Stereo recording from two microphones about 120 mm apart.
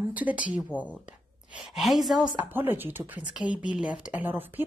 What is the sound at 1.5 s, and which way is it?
Speech, centre (ahead or behind).